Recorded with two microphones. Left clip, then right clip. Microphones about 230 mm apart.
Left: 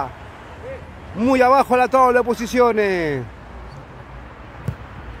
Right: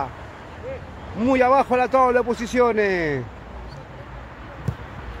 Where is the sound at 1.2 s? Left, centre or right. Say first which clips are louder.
Left 3 dB; left.